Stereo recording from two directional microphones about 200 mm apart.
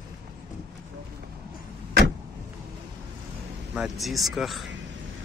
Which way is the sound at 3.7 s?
Centre (ahead or behind).